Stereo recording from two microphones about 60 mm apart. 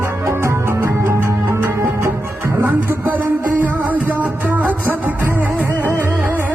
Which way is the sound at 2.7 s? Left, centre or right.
Right.